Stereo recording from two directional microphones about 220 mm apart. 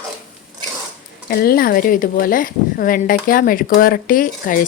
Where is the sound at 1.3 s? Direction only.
45° left (ahead or behind).